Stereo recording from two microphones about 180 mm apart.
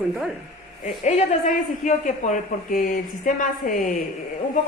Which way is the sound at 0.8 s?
40° left (ahead or behind).